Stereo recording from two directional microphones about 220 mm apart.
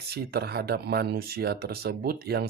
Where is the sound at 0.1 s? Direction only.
45° right (ahead or behind).